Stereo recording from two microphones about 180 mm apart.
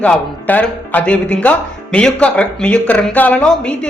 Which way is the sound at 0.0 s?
10° left (ahead or behind).